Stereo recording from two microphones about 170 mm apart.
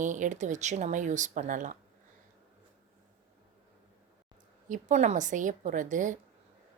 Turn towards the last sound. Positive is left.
turn(degrees=-50)  # may be behind; listen again after turning